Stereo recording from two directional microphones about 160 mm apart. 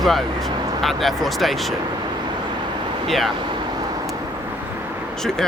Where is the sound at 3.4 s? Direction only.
30° right (ahead or behind).